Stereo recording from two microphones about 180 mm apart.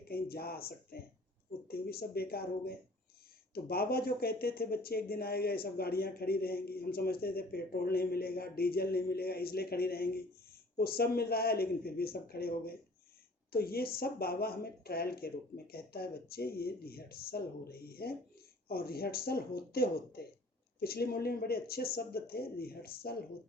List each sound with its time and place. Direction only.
0.1 s speech: 60° left (ahead or behind)